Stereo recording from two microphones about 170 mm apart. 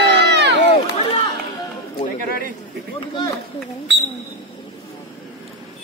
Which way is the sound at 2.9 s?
30° left (ahead or behind).